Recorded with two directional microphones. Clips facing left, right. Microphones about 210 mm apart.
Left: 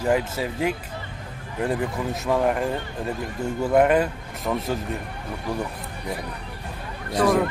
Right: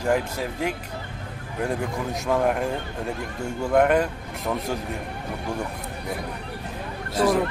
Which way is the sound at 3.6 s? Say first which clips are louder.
Left 1 dB; 5° left (ahead or behind).